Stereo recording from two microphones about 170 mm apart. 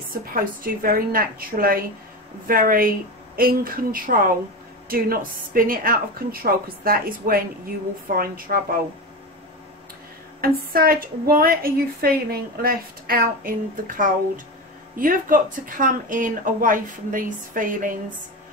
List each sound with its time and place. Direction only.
0.1 s a woman's voice: 55° right (ahead or behind)
10.4 s a woman's voice: 60° right (ahead or behind)